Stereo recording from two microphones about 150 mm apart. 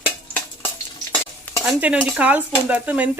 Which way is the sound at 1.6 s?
5° right (ahead or behind).